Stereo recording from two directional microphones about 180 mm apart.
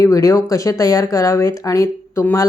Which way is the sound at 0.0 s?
20° left (ahead or behind).